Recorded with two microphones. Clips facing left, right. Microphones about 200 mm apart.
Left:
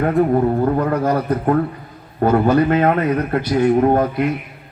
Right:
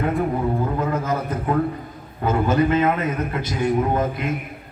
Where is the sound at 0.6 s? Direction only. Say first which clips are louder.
Left 6 dB; 55° left (ahead or behind).